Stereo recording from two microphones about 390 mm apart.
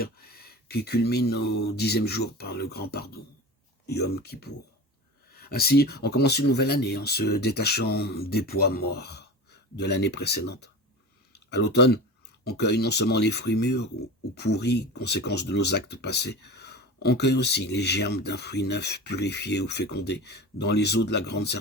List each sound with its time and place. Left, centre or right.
0.0 s speech: left